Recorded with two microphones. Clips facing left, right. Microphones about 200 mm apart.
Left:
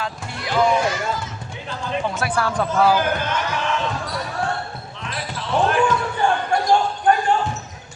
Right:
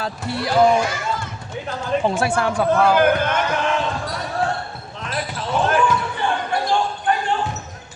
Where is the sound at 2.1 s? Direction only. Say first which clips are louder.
Right 3 dB; 25° right (ahead or behind).